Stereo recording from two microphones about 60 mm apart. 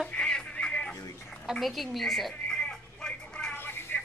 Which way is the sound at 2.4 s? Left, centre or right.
Centre.